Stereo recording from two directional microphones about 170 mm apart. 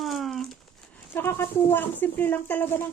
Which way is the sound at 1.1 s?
15° left (ahead or behind).